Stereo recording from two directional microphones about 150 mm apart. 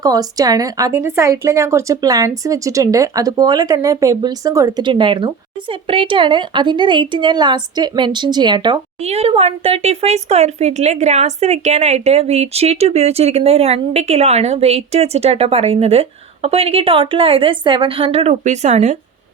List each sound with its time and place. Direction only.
0.0 s a woman's voice: 25° right (ahead or behind)
9.0 s speech: 45° right (ahead or behind)